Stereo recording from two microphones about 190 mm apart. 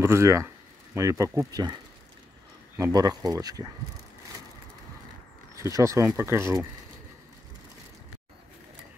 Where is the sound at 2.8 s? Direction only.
20° right (ahead or behind).